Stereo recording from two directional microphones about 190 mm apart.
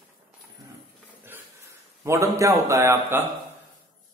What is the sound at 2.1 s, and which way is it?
A man's voice, 15° right (ahead or behind).